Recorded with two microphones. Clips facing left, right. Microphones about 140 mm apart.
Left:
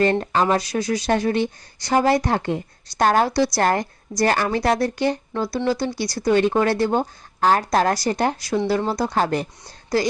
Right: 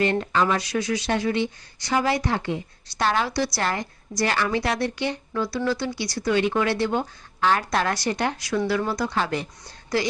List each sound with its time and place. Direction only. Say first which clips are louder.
0.0 s a woman's voice: left 3 dB; 40° left (ahead or behind)